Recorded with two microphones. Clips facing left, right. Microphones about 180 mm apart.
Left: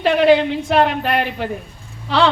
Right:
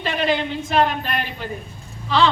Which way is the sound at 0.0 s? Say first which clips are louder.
Left 9 dB; 65° left (ahead or behind).